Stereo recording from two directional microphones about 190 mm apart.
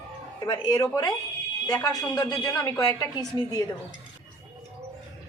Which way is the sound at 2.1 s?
20° left (ahead or behind).